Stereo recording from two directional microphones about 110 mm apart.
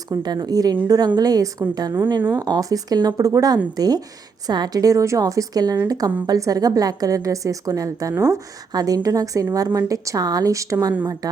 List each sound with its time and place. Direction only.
0.1 s a woman's voice: 40° right (ahead or behind)